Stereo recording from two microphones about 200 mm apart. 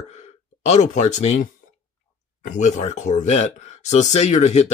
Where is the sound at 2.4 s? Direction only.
35° left (ahead or behind).